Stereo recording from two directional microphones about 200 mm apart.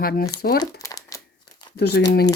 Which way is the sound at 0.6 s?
20° left (ahead or behind).